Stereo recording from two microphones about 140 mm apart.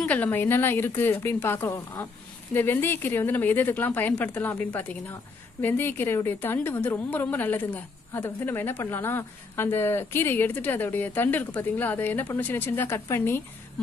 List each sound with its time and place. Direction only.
0.0 s a woman's voice: 10° left (ahead or behind)